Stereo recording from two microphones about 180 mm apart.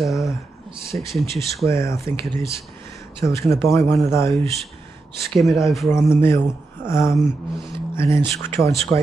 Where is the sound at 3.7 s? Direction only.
15° left (ahead or behind).